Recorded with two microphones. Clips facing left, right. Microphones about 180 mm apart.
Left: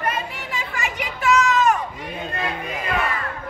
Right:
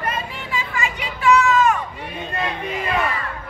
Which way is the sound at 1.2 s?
40° left (ahead or behind).